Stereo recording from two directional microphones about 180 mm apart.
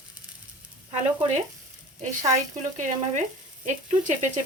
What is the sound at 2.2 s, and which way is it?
Speech, 40° right (ahead or behind).